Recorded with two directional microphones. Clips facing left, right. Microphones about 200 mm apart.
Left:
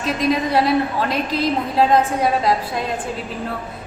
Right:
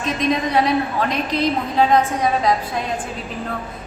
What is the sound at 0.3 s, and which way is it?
A woman's voice, 5° left (ahead or behind).